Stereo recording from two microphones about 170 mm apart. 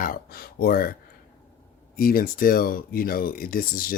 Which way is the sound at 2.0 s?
55° left (ahead or behind).